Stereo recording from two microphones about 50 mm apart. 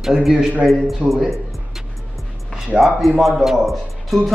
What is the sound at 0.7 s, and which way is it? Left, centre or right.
Speech, centre.